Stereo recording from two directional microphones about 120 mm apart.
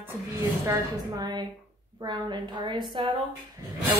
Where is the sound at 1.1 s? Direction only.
35° right (ahead or behind).